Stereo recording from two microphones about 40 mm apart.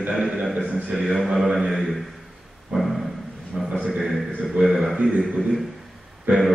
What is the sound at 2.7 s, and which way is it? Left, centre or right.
Dog, centre.